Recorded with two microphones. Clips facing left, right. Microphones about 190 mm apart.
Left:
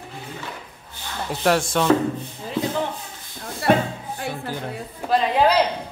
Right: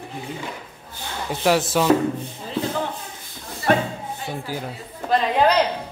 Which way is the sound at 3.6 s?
70° left (ahead or behind).